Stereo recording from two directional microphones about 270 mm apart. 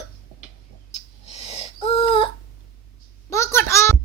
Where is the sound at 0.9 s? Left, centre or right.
Left.